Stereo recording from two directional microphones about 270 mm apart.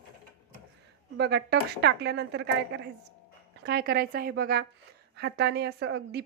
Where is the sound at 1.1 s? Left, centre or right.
Right.